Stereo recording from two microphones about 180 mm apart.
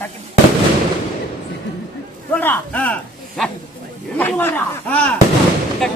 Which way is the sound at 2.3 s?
10° left (ahead or behind).